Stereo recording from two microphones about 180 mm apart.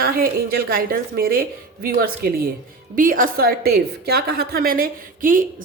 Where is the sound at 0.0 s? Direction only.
55° right (ahead or behind).